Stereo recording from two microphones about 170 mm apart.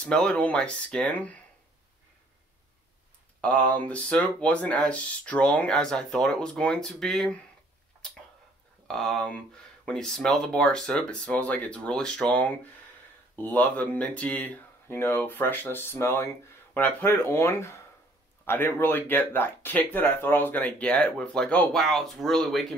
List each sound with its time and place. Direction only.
0.0 s speech: 5° left (ahead or behind)
3.3 s speech: 10° left (ahead or behind)
8.8 s speech: centre (ahead or behind)